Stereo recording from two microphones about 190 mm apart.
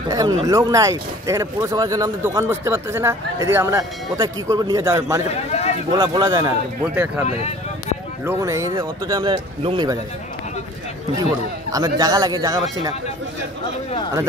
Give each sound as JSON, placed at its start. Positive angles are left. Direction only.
{"t": 0.1, "sound": "speech", "side_deg": -20}
{"t": 5.3, "sound": "a man's voice", "side_deg": 35}
{"t": 5.9, "sound": "speech", "side_deg": -20}
{"t": 7.2, "sound": "speech", "side_deg": 35}
{"t": 8.3, "sound": "speech", "side_deg": -15}
{"t": 11.7, "sound": "speech", "side_deg": -20}